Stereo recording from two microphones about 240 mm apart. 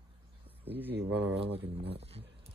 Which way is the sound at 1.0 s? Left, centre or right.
Right.